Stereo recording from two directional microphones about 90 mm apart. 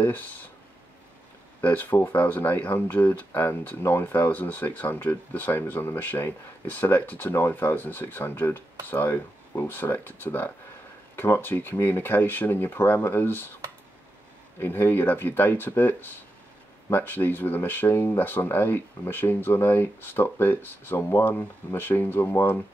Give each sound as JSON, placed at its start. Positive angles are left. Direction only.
{"t": 0.0, "sound": "speech", "side_deg": 20}
{"t": 1.6, "sound": "speech", "side_deg": 20}
{"t": 14.6, "sound": "speech", "side_deg": 20}